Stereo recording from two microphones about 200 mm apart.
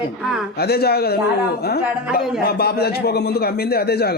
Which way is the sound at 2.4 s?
50° left (ahead or behind).